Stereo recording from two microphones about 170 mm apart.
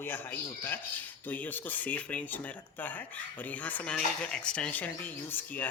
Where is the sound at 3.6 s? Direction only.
5° left (ahead or behind).